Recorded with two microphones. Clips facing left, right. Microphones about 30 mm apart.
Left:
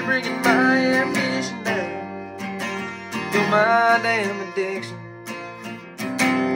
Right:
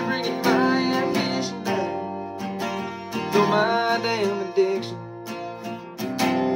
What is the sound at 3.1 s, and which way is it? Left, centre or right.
Music, left.